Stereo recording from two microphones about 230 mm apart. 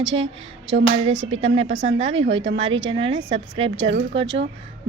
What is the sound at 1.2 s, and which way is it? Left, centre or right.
Speech, right.